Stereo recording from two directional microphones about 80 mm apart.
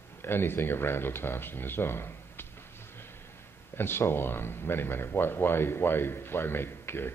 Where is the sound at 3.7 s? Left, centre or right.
Left.